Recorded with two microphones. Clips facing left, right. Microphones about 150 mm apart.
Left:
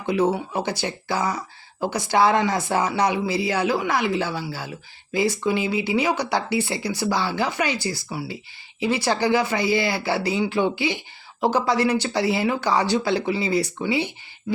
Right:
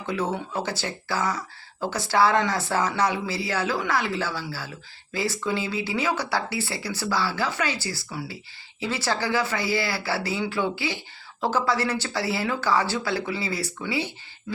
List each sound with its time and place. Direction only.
0.0 s speech: 15° left (ahead or behind)